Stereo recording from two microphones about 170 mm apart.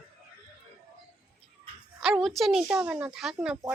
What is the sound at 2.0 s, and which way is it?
A woman's voice, 5° right (ahead or behind).